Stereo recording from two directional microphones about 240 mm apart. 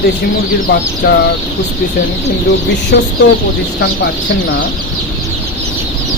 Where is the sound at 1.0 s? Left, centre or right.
Left.